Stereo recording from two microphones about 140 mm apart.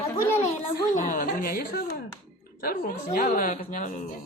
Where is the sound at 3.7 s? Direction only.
65° left (ahead or behind).